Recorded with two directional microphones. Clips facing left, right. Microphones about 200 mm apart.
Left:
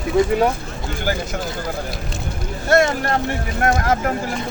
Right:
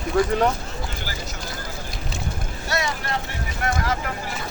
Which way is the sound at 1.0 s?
55° left (ahead or behind).